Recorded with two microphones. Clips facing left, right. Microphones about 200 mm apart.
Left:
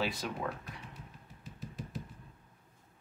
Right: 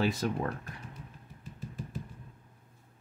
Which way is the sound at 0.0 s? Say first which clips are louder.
Right 6 dB; 45° right (ahead or behind).